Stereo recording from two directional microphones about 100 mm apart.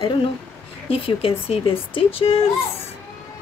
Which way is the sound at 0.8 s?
70° left (ahead or behind).